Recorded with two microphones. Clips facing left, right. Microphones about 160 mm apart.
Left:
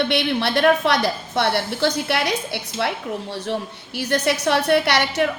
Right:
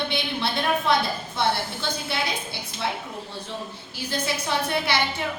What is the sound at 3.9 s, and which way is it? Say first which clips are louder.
A woman's voice: left 8 dB; 75° left (ahead or behind).